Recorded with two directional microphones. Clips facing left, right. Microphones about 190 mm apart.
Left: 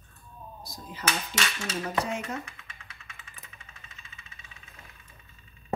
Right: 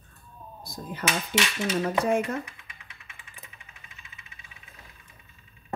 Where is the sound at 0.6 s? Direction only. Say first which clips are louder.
Right 8 dB; 55° right (ahead or behind).